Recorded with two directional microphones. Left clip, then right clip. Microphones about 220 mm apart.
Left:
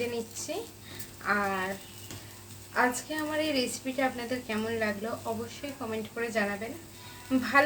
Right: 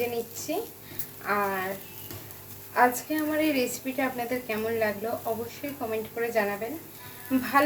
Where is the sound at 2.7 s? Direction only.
15° left (ahead or behind).